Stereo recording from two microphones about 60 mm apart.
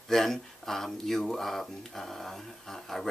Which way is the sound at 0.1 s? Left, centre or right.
Centre.